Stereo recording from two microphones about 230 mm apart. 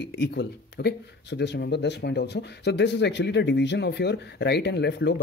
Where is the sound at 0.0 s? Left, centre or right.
Left.